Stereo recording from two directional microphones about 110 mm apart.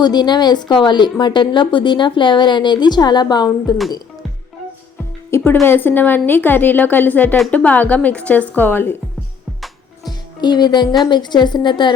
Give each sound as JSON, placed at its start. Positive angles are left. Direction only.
{"t": 0.0, "sound": "a woman's voice", "side_deg": 40}
{"t": 5.3, "sound": "a woman's voice", "side_deg": 25}
{"t": 10.1, "sound": "music", "side_deg": 40}
{"t": 11.0, "sound": "a woman's voice", "side_deg": 40}